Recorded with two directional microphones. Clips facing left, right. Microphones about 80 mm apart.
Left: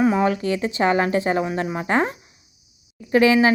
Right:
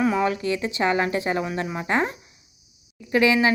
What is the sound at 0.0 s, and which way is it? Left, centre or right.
Speech, left.